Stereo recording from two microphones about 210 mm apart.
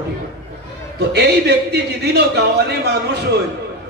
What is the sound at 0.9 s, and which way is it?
Speech, 55° right (ahead or behind).